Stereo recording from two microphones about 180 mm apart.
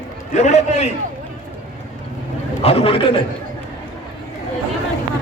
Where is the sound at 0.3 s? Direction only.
40° left (ahead or behind).